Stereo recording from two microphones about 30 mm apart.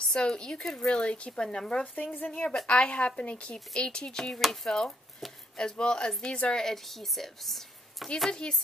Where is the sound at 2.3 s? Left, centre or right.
Left.